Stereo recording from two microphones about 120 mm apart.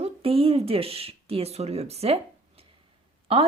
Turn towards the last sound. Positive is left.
turn(degrees=-50)  # may be behind; listen again after turning